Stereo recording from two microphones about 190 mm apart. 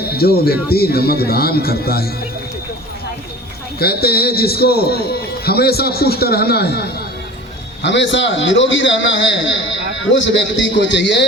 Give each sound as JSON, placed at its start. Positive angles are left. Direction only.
{"t": 0.0, "sound": "a man's voice", "side_deg": 55}
{"t": 3.8, "sound": "a man's voice", "side_deg": 55}
{"t": 7.8, "sound": "a man's voice", "side_deg": 70}